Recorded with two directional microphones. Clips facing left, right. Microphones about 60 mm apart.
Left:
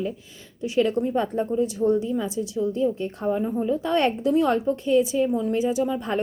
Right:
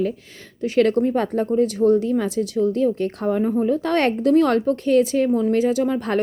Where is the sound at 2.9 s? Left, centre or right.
Right.